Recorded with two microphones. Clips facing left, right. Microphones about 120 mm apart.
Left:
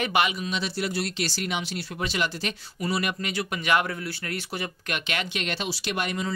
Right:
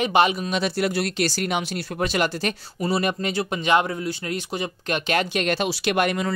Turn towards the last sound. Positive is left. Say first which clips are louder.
# right 7 dB
turn(degrees=-60)  # may be behind; listen again after turning